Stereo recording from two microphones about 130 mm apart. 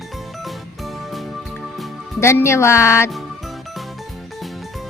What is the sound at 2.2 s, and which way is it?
Speech, 20° left (ahead or behind).